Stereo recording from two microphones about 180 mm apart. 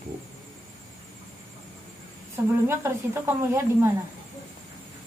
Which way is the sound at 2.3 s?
15° right (ahead or behind).